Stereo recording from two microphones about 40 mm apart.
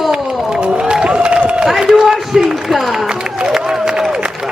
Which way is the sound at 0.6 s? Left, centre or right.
Right.